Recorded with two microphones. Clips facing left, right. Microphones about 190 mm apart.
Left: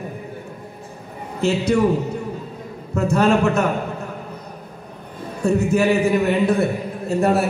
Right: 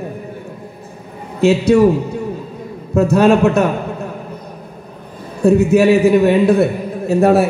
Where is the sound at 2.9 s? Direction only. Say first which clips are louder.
Right 6 dB; 65° right (ahead or behind).